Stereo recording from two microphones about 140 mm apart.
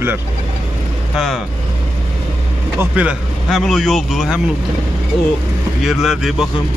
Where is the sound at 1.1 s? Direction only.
Centre (ahead or behind).